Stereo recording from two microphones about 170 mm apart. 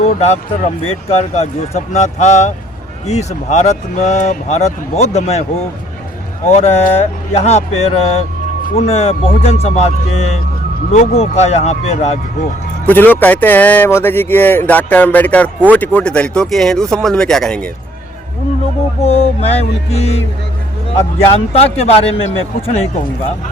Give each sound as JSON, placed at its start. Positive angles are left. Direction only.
{"t": 0.0, "sound": "speech", "side_deg": 40}
{"t": 6.5, "sound": "speech", "side_deg": 40}
{"t": 12.8, "sound": "speech", "side_deg": 10}
{"t": 19.0, "sound": "speech", "side_deg": 35}
{"t": 21.2, "sound": "speech", "side_deg": 35}